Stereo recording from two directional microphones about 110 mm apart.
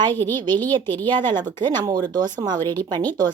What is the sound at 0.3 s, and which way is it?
Speech, 40° right (ahead or behind).